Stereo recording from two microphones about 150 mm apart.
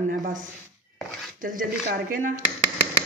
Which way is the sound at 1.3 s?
65° right (ahead or behind).